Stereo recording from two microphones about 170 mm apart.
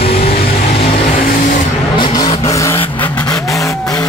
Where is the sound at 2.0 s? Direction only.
30° left (ahead or behind).